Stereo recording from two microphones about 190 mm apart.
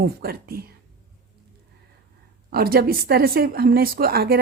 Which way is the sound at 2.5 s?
55° right (ahead or behind).